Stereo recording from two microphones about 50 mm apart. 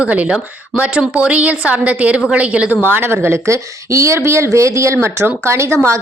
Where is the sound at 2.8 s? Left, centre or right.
Right.